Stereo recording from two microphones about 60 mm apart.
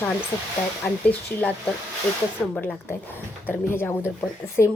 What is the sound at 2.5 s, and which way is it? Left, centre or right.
Speech, left.